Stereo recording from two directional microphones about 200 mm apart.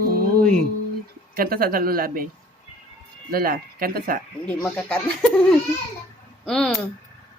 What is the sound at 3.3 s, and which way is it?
Speech, 50° right (ahead or behind).